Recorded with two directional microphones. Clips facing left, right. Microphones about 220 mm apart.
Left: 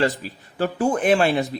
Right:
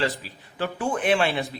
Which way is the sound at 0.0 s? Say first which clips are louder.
Left 5 dB; 45° left (ahead or behind).